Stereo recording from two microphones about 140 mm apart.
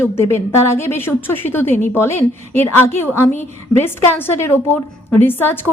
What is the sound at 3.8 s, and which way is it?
Speech, 15° left (ahead or behind).